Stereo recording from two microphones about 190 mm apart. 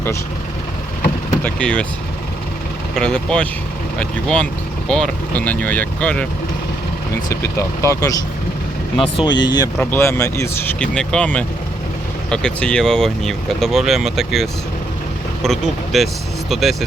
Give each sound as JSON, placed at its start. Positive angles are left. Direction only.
{"t": 1.5, "sound": "speech", "side_deg": 5}
{"t": 2.9, "sound": "speech", "side_deg": 5}
{"t": 7.5, "sound": "speech", "side_deg": 15}
{"t": 9.7, "sound": "speech", "side_deg": 10}
{"t": 15.4, "sound": "speech", "side_deg": 0}